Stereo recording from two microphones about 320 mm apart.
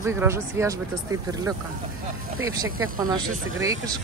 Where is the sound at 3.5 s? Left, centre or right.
Centre.